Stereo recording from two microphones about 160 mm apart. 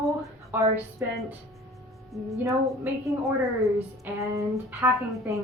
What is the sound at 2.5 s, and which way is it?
Speech, 20° right (ahead or behind).